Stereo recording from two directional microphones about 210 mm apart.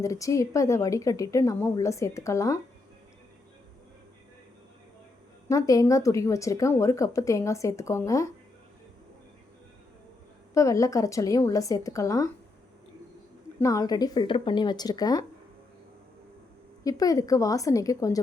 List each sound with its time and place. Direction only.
0.0 s a woman's voice: 15° left (ahead or behind)
5.5 s a woman's voice: 15° left (ahead or behind)
10.5 s a woman's voice: 15° left (ahead or behind)
13.6 s speech: 15° left (ahead or behind)
16.8 s a woman's voice: 15° left (ahead or behind)